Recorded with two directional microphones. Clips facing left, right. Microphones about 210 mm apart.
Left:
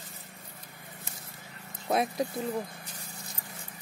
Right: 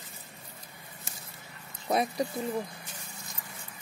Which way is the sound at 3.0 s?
35° left (ahead or behind).